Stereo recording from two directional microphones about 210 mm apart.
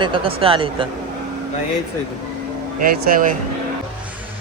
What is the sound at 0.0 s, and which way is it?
Speech, 25° right (ahead or behind).